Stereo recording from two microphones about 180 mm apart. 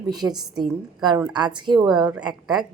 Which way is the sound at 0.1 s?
20° right (ahead or behind).